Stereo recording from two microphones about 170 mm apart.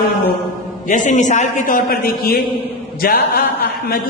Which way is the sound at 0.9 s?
45° left (ahead or behind).